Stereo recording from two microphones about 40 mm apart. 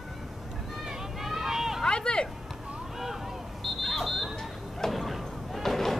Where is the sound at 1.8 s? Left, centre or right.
Left.